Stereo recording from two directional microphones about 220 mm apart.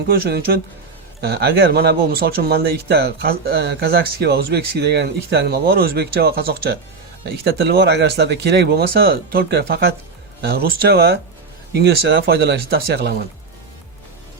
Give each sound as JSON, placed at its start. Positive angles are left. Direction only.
{"t": 0.1, "sound": "speech", "side_deg": -45}